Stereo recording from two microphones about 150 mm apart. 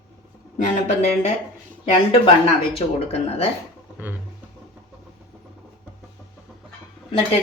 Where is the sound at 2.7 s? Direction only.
40° left (ahead or behind).